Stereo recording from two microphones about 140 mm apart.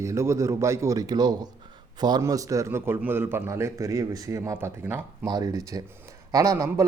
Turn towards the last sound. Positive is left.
turn(degrees=-25)  # may be behind; listen again after turning